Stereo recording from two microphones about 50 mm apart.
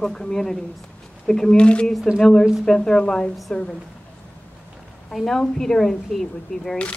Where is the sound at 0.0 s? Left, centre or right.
Centre.